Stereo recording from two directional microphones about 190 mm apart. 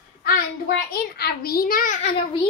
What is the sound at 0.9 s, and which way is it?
A child's voice, 55° left (ahead or behind).